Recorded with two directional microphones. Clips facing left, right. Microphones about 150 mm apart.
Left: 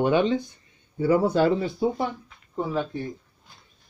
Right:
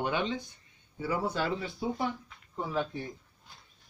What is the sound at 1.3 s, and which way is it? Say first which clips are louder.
Speech: left 11 dB; 40° left (ahead or behind).